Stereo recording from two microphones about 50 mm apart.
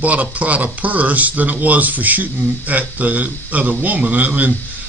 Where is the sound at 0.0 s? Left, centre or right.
Right.